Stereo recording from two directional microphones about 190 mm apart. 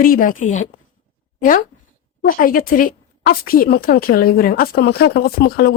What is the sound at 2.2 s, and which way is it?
A woman's voice, 50° left (ahead or behind).